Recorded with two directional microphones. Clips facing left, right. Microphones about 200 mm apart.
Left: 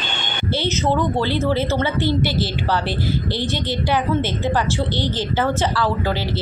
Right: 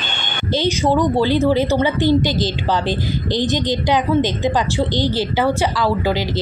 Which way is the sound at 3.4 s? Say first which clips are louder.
Right 4 dB; 20° right (ahead or behind).